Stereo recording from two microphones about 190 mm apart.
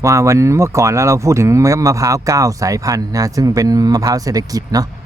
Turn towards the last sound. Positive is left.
turn(degrees=-20)  # may be behind; listen again after turning